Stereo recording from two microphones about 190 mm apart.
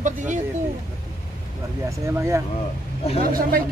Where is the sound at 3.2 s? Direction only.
50° right (ahead or behind).